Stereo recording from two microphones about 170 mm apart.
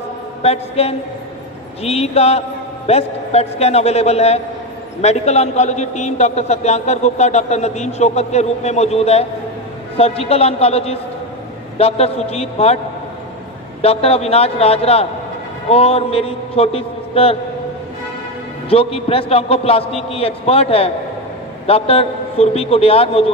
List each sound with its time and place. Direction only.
0.4 s a man's voice: 35° left (ahead or behind)
13.7 s a man's voice: 35° left (ahead or behind)
18.7 s a man's voice: 35° left (ahead or behind)